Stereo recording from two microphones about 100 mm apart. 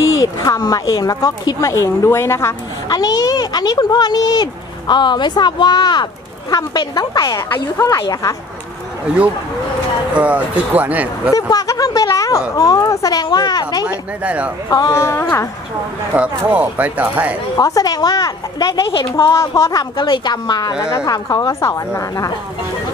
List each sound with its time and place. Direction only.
0.1 s a woman's voice: 35° left (ahead or behind)
1.7 s a woman's voice: 30° left (ahead or behind)
2.9 s a woman's voice: 40° left (ahead or behind)
10.1 s speech: 15° right (ahead or behind)
11.3 s a woman's voice: 35° left (ahead or behind)
13.8 s speech: 15° right (ahead or behind)
14.7 s a woman's voice: 35° left (ahead or behind)
16.1 s speech: 15° right (ahead or behind)
17.6 s a woman's voice: 35° left (ahead or behind)
20.0 s a woman's voice: 45° left (ahead or behind)